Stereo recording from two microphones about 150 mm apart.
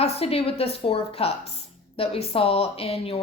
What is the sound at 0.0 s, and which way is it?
A woman's voice, 40° left (ahead or behind).